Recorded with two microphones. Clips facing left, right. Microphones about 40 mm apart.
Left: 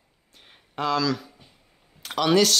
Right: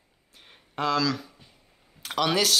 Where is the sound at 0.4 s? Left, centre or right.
Centre.